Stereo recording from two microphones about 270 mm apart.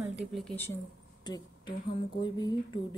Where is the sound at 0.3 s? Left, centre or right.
Centre.